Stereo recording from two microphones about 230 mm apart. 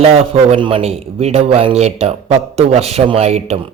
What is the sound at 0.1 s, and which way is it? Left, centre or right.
A man's voice, right.